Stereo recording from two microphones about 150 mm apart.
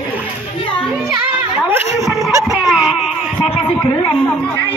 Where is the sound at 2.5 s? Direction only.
Centre (ahead or behind).